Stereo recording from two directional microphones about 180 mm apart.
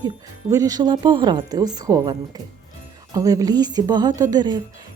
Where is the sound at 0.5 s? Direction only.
20° right (ahead or behind).